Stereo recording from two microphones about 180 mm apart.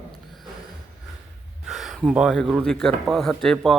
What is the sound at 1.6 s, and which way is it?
Speech, centre (ahead or behind).